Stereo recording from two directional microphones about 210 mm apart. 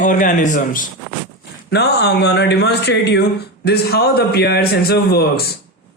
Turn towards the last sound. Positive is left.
turn(degrees=45)  # may be behind; listen again after turning